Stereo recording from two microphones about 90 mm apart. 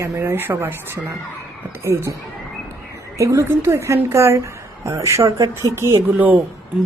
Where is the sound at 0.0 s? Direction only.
30° right (ahead or behind).